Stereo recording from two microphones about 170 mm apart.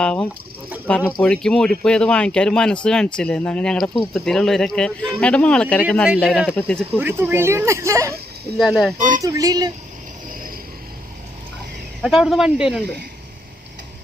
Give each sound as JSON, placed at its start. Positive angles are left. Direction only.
{"t": 0.0, "sound": "a sound", "side_deg": 5}
{"t": 0.9, "sound": "speech", "side_deg": 5}
{"t": 6.9, "sound": "speech", "side_deg": -10}
{"t": 8.5, "sound": "speech", "side_deg": 0}
{"t": 9.2, "sound": "speech", "side_deg": -20}
{"t": 12.0, "sound": "speech", "side_deg": 0}